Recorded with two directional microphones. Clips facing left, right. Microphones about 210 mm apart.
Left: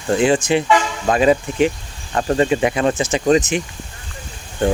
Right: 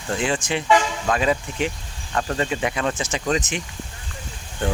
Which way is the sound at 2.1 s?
30° left (ahead or behind).